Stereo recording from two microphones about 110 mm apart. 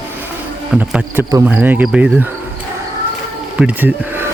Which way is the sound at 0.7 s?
10° right (ahead or behind).